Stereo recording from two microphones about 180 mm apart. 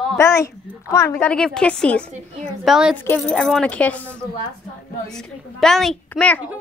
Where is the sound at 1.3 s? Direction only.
5° left (ahead or behind).